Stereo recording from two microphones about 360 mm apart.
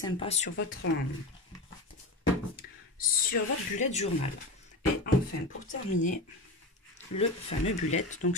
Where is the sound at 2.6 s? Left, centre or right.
Left.